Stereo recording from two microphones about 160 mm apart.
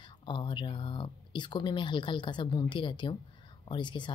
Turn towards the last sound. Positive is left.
turn(degrees=30)  # may be behind; listen again after turning